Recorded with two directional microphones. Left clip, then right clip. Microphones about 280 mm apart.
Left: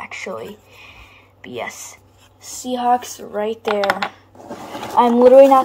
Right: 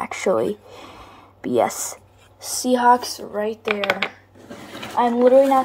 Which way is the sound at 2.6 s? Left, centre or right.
Centre.